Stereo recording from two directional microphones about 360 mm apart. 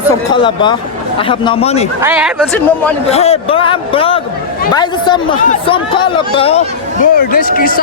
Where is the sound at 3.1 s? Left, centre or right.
Centre.